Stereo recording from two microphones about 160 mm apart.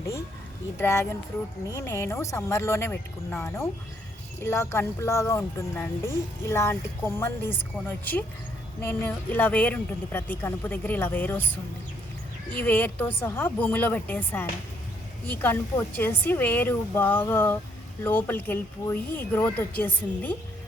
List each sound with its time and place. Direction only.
0.8 s speech: 15° left (ahead or behind)
12.5 s speech: 10° left (ahead or behind)